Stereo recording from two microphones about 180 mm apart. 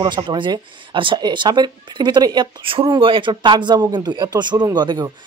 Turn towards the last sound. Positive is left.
turn(degrees=-20)  # may be behind; listen again after turning